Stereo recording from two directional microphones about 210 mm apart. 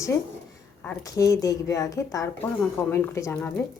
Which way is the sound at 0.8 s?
15° left (ahead or behind).